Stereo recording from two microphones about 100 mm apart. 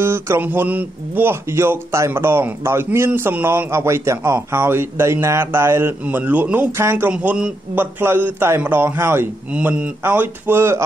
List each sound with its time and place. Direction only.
0.0 s a man's voice: 25° right (ahead or behind)
7.1 s a man's voice: 15° right (ahead or behind)
7.7 s speech: 20° right (ahead or behind)